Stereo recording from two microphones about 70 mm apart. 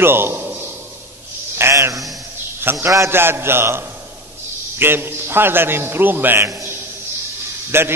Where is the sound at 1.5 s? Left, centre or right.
Right.